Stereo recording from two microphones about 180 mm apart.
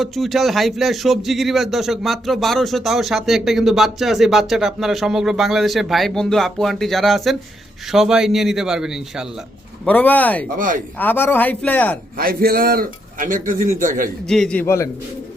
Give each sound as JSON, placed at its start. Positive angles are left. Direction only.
{"t": 0.0, "sound": "speech", "side_deg": 0}
{"t": 9.8, "sound": "a man's voice", "side_deg": 10}
{"t": 10.6, "sound": "a man's voice", "side_deg": -50}
{"t": 10.9, "sound": "a man's voice", "side_deg": 10}
{"t": 12.1, "sound": "a man's voice", "side_deg": -55}
{"t": 14.3, "sound": "a man's voice", "side_deg": 5}